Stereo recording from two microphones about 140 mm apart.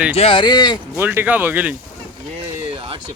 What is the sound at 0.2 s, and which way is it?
Speech, 40° left (ahead or behind).